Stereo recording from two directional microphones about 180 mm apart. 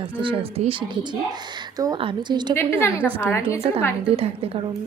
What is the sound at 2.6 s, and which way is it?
Speech, 10° left (ahead or behind).